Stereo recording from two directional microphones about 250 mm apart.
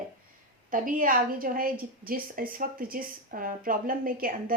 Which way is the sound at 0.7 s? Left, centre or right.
Right.